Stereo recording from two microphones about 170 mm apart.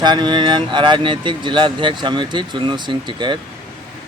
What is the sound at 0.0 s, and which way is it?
Speech, 25° right (ahead or behind).